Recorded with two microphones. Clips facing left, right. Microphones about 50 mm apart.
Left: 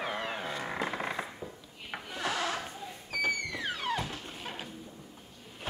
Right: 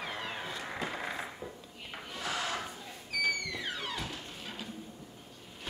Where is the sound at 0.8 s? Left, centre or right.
Left.